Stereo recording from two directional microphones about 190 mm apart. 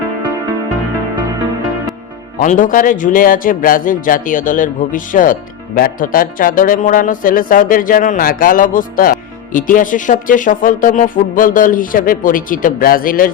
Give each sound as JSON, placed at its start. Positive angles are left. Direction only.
{"t": 2.4, "sound": "speech", "side_deg": 40}